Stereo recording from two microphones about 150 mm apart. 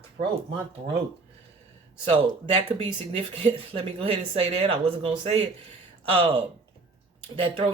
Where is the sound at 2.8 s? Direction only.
35° right (ahead or behind).